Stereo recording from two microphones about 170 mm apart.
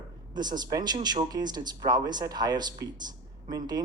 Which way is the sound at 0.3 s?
25° right (ahead or behind).